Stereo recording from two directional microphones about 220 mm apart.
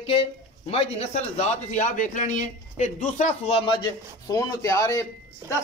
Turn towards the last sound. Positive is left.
turn(degrees=15)  # may be behind; listen again after turning